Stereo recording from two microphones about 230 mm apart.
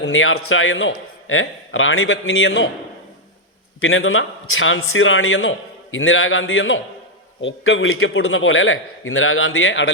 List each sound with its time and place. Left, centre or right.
0.0 s a man's voice: left
3.8 s a man's voice: left